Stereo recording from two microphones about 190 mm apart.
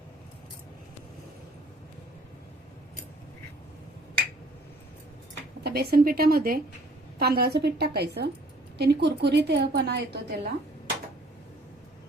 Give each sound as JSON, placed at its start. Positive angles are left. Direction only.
{"t": 5.6, "sound": "a woman's voice", "side_deg": -55}